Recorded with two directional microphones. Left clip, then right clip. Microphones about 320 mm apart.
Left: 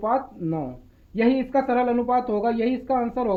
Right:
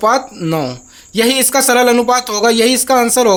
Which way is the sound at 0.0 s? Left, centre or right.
Right.